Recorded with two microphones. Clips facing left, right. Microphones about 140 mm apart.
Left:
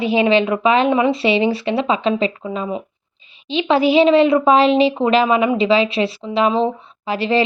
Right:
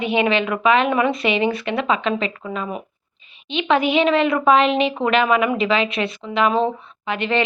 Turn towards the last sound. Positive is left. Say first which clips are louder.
# left 4 dB
turn(degrees=35)  # may be behind; listen again after turning